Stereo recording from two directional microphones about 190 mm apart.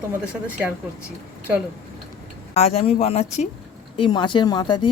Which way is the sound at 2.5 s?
35° left (ahead or behind).